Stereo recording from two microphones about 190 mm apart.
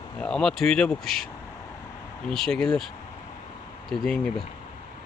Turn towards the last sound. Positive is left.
turn(degrees=0)  # may be behind; listen again after turning